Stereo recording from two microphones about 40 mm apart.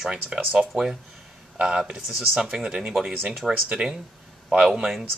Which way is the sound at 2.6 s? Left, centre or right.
Right.